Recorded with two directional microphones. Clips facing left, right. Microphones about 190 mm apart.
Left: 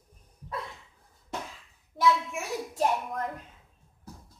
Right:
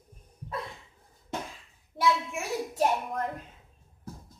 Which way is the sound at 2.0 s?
5° right (ahead or behind).